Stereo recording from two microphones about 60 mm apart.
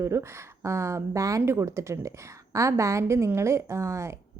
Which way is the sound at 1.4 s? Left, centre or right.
Right.